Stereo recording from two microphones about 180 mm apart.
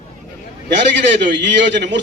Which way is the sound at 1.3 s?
80° right.